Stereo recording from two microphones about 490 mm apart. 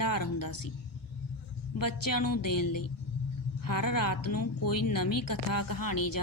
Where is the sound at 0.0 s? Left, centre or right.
Left.